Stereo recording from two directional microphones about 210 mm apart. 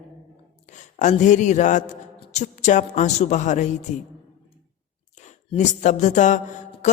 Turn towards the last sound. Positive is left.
turn(degrees=35)  # may be behind; listen again after turning